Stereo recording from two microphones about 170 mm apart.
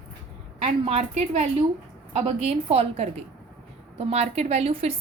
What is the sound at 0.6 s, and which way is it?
A woman's voice, 40° right (ahead or behind).